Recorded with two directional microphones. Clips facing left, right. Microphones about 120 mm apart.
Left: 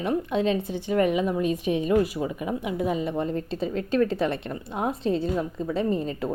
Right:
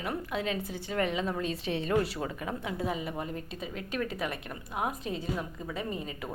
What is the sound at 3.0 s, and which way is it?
A woman's voice, 30° left (ahead or behind).